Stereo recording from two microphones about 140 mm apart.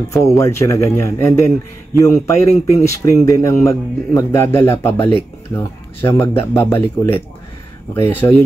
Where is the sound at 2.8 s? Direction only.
20° left (ahead or behind).